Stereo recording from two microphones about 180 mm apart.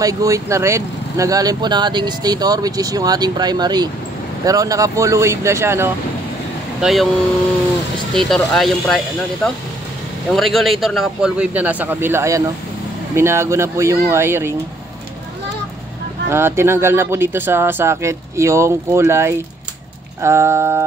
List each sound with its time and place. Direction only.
0.0 s speech: 20° right (ahead or behind)
6.8 s speech: centre (ahead or behind)
8.1 s speech: centre (ahead or behind); by 14.5 s 15° right (ahead or behind)
16.3 s speech: 15° right (ahead or behind)